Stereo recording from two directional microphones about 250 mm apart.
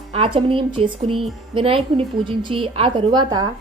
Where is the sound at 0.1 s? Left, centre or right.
Right.